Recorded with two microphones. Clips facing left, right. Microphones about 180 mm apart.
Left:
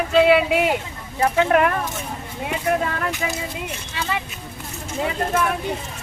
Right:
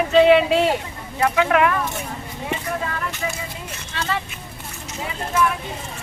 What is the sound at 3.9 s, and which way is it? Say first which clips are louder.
Speech: right 1 dB; 15° left (ahead or behind).